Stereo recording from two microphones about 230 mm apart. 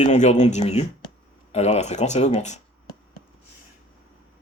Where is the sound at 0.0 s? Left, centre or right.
Left.